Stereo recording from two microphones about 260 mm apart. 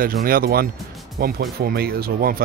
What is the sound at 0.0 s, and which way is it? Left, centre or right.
Speech, right.